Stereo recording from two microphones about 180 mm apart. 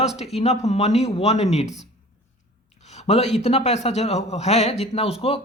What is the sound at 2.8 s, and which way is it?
A man's voice, 40° left (ahead or behind).